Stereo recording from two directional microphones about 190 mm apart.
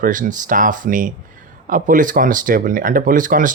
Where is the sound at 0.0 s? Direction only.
45° right (ahead or behind).